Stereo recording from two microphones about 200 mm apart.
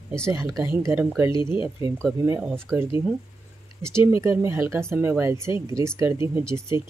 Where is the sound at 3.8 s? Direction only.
10° right (ahead or behind).